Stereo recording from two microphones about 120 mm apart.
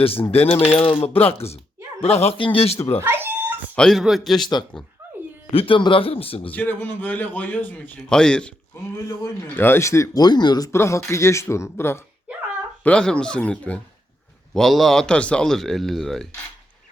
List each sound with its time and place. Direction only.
0.0 s speech: 50° left (ahead or behind)
3.0 s cat: 15° right (ahead or behind)
3.8 s speech: centre (ahead or behind)
5.5 s speech: 45° left (ahead or behind)
6.5 s a man's voice: 15° left (ahead or behind)
8.7 s speech: 25° left (ahead or behind)
10.7 s speech: 20° left (ahead or behind)
12.8 s a man's voice: 10° left (ahead or behind)